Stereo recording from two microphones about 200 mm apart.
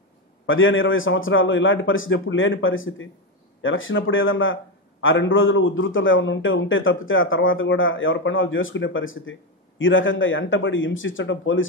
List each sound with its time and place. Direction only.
0.5 s a man's voice: 75° left (ahead or behind)